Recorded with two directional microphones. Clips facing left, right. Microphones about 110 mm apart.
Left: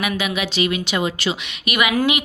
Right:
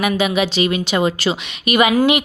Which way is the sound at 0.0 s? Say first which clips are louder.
Right 6 dB; 30° right (ahead or behind).